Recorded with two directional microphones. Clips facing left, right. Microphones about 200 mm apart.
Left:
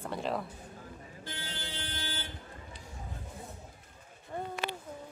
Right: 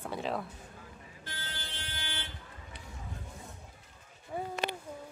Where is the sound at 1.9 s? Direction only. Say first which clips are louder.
Left 1 dB; 35° left (ahead or behind).